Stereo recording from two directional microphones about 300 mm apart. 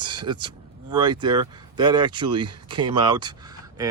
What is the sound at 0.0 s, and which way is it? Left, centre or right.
Speech, centre.